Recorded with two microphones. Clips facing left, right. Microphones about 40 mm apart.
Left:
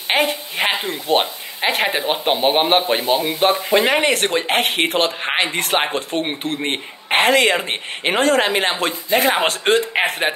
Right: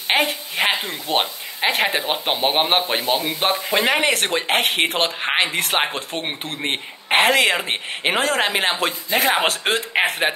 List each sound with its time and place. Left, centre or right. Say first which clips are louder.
0.1 s a woman's voice: left 1 dB; centre